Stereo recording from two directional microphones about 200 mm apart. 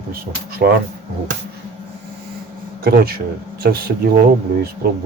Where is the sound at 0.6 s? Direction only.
45° right (ahead or behind).